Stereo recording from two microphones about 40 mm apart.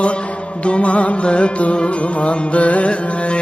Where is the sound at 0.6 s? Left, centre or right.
Left.